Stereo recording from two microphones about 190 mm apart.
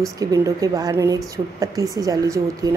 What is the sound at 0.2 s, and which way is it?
A woman's voice, 20° right (ahead or behind).